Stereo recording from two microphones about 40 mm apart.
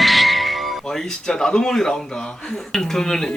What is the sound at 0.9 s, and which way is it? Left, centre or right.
Speech, centre.